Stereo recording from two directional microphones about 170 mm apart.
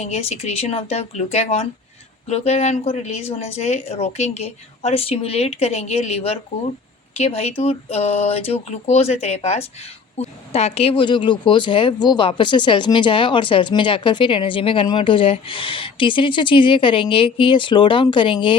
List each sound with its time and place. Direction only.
0.0 s speech: 40° left (ahead or behind)